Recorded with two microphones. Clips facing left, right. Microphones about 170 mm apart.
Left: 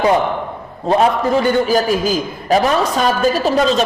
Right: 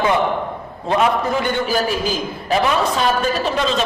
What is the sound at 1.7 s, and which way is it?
A woman's voice, 40° left (ahead or behind).